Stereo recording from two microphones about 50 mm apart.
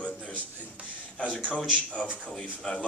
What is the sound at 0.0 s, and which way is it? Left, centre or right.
Music, left.